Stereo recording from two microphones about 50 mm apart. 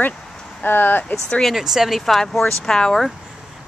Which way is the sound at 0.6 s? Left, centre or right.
Left.